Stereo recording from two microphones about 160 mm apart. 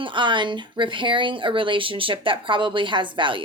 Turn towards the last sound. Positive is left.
turn(degrees=-30)  # may be behind; listen again after turning